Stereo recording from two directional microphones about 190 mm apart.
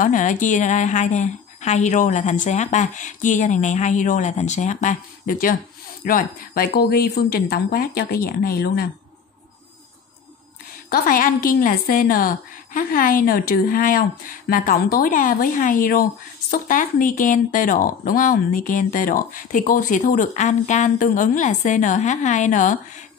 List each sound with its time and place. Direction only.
0.0 s a woman's voice: 40° left (ahead or behind)
10.9 s a woman's voice: 50° left (ahead or behind)